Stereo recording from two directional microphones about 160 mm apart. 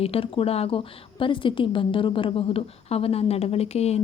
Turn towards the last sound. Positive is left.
turn(degrees=40)  # may be behind; listen again after turning